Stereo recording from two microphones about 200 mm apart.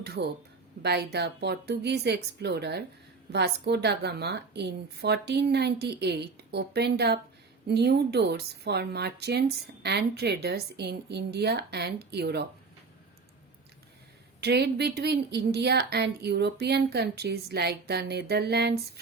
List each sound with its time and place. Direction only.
0.0 s a woman's voice: 55° right (ahead or behind)
14.4 s a woman's voice: 55° right (ahead or behind)